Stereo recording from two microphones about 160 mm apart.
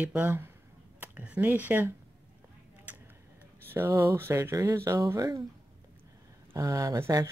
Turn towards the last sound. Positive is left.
turn(degrees=-20)  # may be behind; listen again after turning